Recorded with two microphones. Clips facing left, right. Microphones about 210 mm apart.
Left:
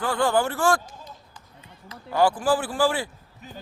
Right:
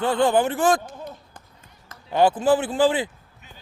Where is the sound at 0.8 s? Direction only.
55° right (ahead or behind).